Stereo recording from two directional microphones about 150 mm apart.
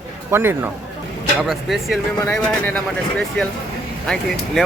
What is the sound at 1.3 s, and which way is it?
Speech, centre (ahead or behind).